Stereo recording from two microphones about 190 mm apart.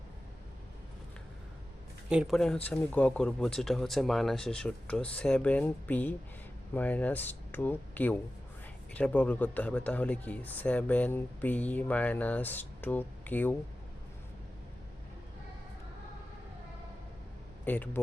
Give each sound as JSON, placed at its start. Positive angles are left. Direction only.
{"t": 2.0, "sound": "speech", "side_deg": 0}
{"t": 17.7, "sound": "speech", "side_deg": 10}